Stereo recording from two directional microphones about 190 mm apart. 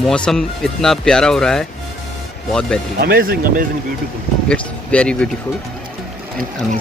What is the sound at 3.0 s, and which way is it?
Speech, 50° right (ahead or behind).